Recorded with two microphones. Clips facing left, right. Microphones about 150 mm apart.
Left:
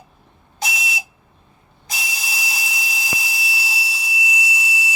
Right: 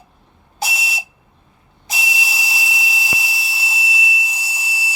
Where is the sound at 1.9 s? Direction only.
Centre (ahead or behind).